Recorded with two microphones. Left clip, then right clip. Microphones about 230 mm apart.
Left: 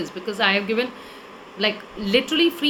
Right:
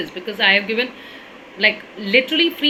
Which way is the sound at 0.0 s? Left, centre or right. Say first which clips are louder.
Right 4 dB; centre.